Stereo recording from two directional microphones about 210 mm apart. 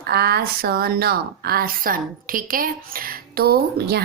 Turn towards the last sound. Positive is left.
turn(degrees=-50)  # may be behind; listen again after turning